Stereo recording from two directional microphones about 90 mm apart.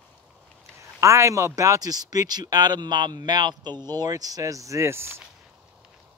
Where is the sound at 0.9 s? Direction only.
35° right (ahead or behind).